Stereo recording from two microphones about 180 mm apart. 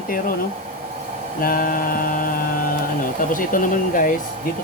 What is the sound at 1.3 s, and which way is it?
Speech, 55° left (ahead or behind).